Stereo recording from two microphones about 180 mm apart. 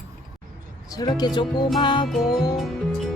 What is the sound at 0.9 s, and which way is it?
Speech, 20° left (ahead or behind).